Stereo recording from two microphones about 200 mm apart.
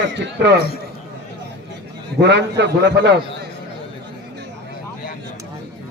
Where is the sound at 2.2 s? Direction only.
60° right (ahead or behind).